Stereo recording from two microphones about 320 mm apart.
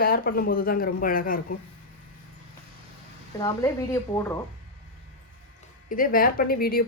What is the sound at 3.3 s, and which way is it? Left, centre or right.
Speech, centre.